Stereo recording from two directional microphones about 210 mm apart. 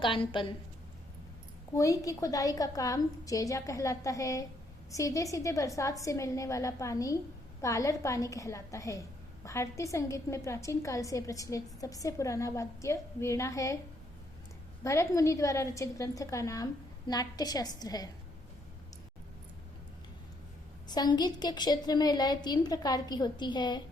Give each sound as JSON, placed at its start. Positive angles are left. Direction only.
{"t": 0.0, "sound": "a woman's voice", "side_deg": 25}
{"t": 1.7, "sound": "a woman's voice", "side_deg": 15}
{"t": 14.8, "sound": "a woman's voice", "side_deg": 15}
{"t": 20.8, "sound": "a woman's voice", "side_deg": 20}